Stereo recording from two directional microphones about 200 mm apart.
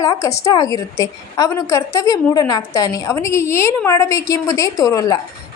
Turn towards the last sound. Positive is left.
turn(degrees=15)  # may be behind; listen again after turning